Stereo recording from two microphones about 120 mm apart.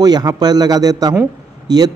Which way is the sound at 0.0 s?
35° right (ahead or behind).